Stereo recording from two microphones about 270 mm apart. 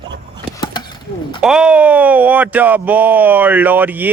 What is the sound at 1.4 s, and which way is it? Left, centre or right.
Speech, centre.